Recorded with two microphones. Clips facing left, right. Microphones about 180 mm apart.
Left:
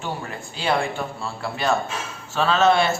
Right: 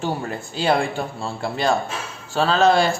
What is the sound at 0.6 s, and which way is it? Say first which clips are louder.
A man's voice: right 3 dB; 35° right (ahead or behind).